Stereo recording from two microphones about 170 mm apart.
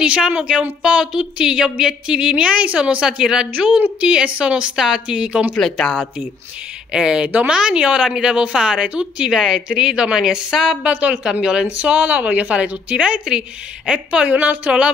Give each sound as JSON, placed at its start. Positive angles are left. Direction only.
{"t": 0.0, "sound": "a woman's voice", "side_deg": -5}